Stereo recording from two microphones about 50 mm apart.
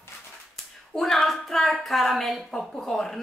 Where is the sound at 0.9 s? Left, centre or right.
Centre.